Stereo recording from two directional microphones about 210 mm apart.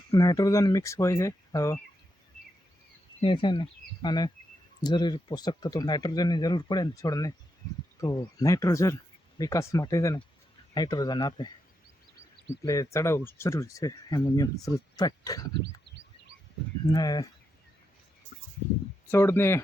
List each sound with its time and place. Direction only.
0.1 s speech: 15° left (ahead or behind)
3.2 s speech: 25° left (ahead or behind)
12.6 s speech: 15° left (ahead or behind)
16.8 s speech: 20° left (ahead or behind)
19.1 s speech: 10° left (ahead or behind)